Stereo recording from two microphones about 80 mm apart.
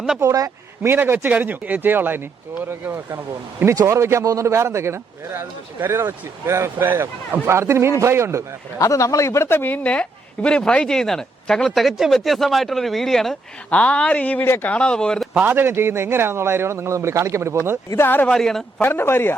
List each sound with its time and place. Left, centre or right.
0.2 s speech: right
0.8 s speech: right
8.8 s speech: left; by 13.3 s centre
13.7 s speech: centre
14.7 s speech: centre
15.3 s speech: right
17.9 s speech: left
18.3 s a man's voice: centre
18.8 s speech: left